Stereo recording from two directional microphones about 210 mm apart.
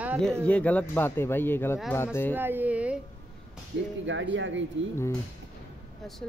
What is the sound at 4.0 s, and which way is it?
Speech, 60° right (ahead or behind).